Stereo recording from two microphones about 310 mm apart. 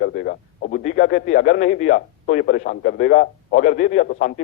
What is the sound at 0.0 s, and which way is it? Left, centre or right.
Radio, left.